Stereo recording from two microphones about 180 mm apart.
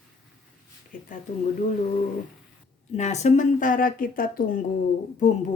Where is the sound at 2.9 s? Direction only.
40° left (ahead or behind).